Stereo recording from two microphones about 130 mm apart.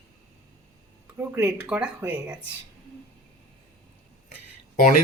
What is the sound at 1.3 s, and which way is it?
Speech, 10° right (ahead or behind).